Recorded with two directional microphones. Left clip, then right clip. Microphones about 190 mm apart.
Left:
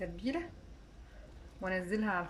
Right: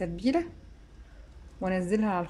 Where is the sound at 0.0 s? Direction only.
25° right (ahead or behind).